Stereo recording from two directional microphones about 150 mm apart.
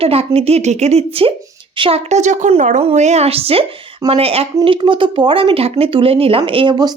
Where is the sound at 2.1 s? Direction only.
50° right (ahead or behind); by 6.9 s 30° right (ahead or behind).